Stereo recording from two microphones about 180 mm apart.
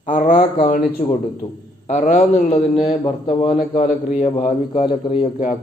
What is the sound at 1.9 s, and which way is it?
A man's voice, 40° left (ahead or behind).